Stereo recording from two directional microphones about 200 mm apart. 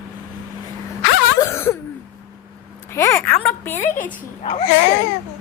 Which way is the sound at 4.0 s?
30° left (ahead or behind).